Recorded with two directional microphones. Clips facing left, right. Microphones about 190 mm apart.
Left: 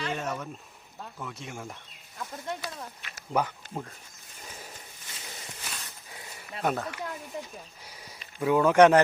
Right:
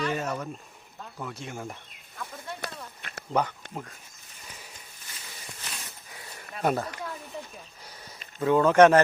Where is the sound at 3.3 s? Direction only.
10° left (ahead or behind).